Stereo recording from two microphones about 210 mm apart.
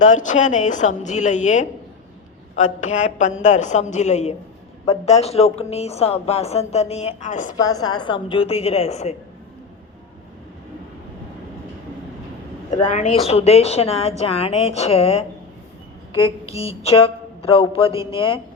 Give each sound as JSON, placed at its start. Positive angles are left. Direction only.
{"t": 0.0, "sound": "a woman's voice", "side_deg": 35}
{"t": 7.5, "sound": "speech", "side_deg": 20}
{"t": 12.8, "sound": "speech", "side_deg": 35}